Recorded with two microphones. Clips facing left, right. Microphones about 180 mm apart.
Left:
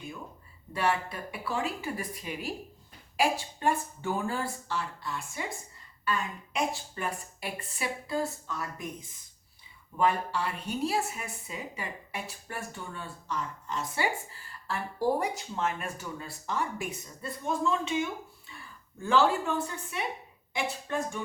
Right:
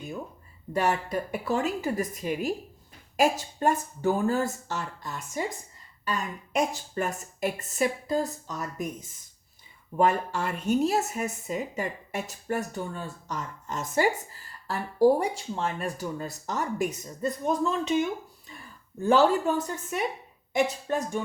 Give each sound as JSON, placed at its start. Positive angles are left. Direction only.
{"t": 0.7, "sound": "speech", "side_deg": -45}
{"t": 19.0, "sound": "speech", "side_deg": -40}